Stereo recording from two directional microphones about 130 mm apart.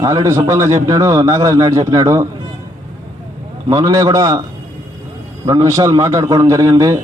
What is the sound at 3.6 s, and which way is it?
Speech, 25° right (ahead or behind).